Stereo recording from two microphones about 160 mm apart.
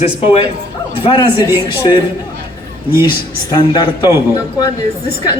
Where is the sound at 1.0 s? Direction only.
30° left (ahead or behind).